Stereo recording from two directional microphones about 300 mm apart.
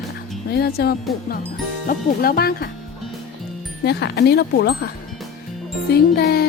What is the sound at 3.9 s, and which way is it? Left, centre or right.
Speech, left.